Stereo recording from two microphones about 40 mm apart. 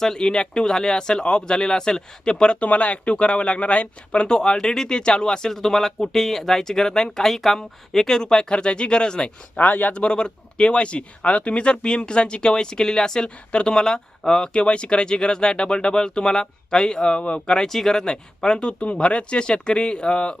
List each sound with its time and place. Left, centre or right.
0.0 s speech: centre
2.6 s speech: left
4.3 s speech: centre
9.6 s speech: left
9.9 s speech: left
13.5 s speech: left
13.7 s speech: centre
17.7 s speech: centre
18.0 s speech: centre